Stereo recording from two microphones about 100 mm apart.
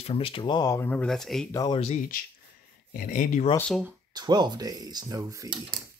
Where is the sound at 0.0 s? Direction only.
70° left (ahead or behind).